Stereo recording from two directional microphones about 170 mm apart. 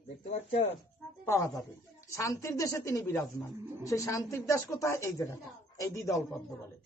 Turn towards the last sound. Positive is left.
turn(degrees=15)  # may be behind; listen again after turning